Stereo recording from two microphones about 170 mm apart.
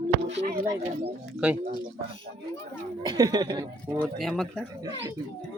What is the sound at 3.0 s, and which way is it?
Speech, 25° right (ahead or behind).